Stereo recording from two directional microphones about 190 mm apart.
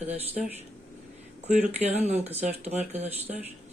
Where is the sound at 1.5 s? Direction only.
35° right (ahead or behind).